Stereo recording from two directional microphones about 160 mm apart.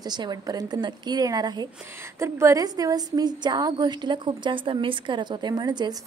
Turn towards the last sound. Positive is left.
turn(degrees=-25)  # may be behind; listen again after turning